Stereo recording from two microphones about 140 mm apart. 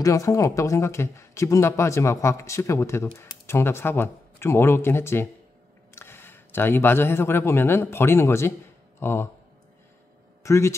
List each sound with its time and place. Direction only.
0.0 s speech: 25° left (ahead or behind)
10.4 s speech: 20° left (ahead or behind)